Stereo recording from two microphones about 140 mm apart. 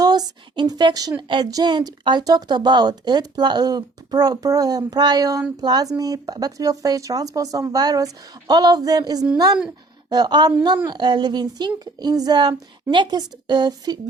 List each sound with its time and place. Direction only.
0.0 s a woman's voice: 30° right (ahead or behind)